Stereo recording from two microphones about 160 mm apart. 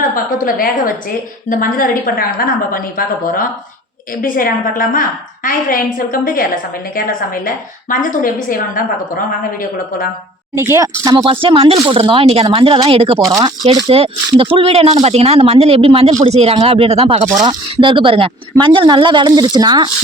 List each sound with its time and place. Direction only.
0.1 s a woman's voice: 60° left (ahead or behind)
10.5 s a woman's voice: 15° right (ahead or behind)